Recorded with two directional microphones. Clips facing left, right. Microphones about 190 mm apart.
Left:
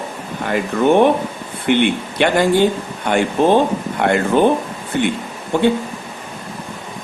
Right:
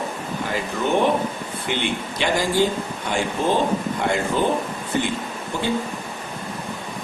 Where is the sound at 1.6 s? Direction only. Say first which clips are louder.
Left 10 dB; 60° left (ahead or behind).